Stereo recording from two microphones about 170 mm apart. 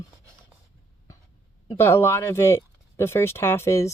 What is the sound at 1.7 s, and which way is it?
Speech, 15° left (ahead or behind).